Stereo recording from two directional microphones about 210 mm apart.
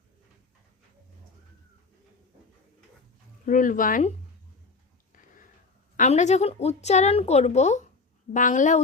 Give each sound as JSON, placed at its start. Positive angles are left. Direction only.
{"t": 3.4, "sound": "a woman's voice", "side_deg": 40}
{"t": 6.0, "sound": "a woman's voice", "side_deg": 35}